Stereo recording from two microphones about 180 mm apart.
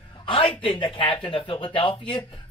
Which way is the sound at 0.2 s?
30° left (ahead or behind).